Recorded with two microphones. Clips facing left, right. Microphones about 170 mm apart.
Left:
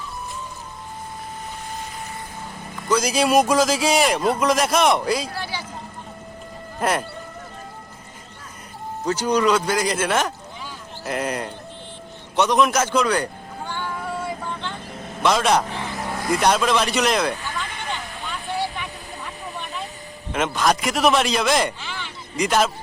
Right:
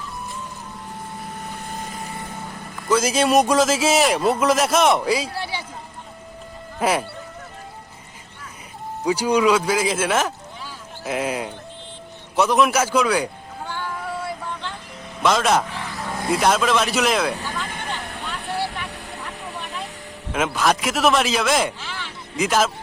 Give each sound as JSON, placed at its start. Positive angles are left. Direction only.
{"t": 2.9, "sound": "a man's voice", "side_deg": 0}
{"t": 5.3, "sound": "a sound", "side_deg": -25}
{"t": 6.7, "sound": "speech", "side_deg": -5}
{"t": 9.0, "sound": "a man's voice", "side_deg": -10}
{"t": 12.4, "sound": "music", "side_deg": -5}
{"t": 14.5, "sound": "vehicle", "side_deg": -5}
{"t": 15.2, "sound": "a man's voice", "side_deg": 0}
{"t": 18.2, "sound": "vehicle", "side_deg": 0}
{"t": 20.3, "sound": "a man's voice", "side_deg": -5}